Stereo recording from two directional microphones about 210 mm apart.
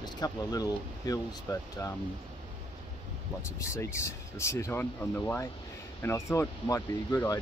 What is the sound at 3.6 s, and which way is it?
Speech, 15° left (ahead or behind).